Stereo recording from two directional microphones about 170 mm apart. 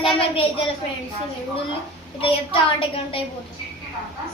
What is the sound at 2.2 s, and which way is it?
A woman's voice, 30° left (ahead or behind).